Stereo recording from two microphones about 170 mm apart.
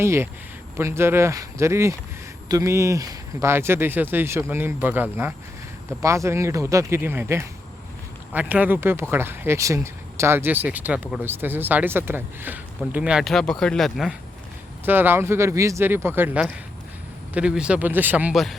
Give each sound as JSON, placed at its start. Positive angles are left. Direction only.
{"t": 0.0, "sound": "speech", "side_deg": -15}
{"t": 14.8, "sound": "speech", "side_deg": -10}